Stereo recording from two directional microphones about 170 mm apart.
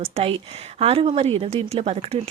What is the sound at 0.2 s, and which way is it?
A woman's voice, 35° right (ahead or behind).